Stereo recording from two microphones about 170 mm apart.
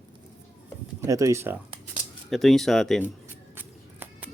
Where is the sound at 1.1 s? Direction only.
20° right (ahead or behind).